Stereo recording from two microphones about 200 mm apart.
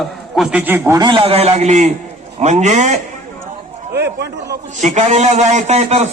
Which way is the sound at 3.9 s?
55° right (ahead or behind).